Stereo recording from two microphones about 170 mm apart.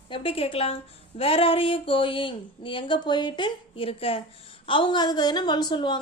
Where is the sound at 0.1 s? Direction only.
35° left (ahead or behind).